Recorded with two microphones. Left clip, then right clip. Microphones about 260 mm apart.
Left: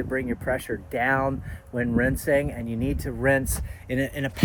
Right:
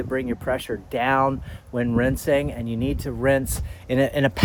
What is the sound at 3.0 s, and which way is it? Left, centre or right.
Speech, centre.